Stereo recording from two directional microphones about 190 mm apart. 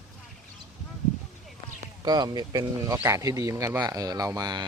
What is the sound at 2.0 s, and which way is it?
Speech, 20° right (ahead or behind).